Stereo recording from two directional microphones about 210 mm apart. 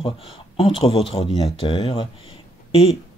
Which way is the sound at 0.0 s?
25° left (ahead or behind).